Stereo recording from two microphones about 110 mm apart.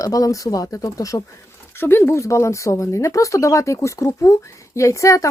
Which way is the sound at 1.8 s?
20° left (ahead or behind).